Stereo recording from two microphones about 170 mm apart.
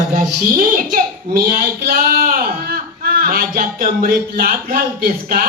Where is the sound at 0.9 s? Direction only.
55° right (ahead or behind).